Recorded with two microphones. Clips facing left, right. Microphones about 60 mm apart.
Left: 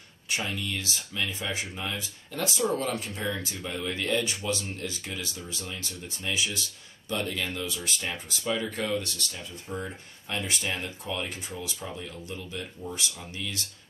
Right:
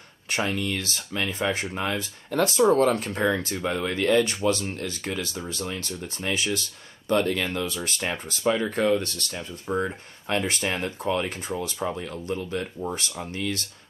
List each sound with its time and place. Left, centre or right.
0.3 s speech: right